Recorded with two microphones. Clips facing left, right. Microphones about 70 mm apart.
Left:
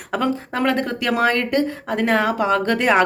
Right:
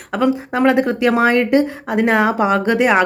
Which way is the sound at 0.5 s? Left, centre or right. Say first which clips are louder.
Right 7 dB; centre.